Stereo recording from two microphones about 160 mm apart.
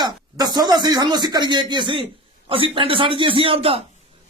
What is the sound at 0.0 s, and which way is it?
A man's voice, 25° right (ahead or behind).